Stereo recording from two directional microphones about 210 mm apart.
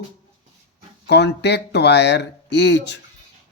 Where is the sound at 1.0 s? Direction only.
55° left (ahead or behind).